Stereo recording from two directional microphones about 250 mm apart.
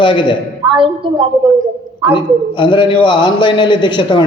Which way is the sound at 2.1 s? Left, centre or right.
Centre.